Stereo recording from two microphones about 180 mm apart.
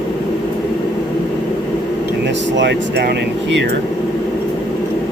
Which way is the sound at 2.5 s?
75° right (ahead or behind).